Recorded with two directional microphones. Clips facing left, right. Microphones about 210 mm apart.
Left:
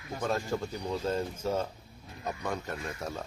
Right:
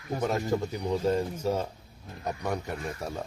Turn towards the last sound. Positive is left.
turn(degrees=-15)  # may be behind; listen again after turning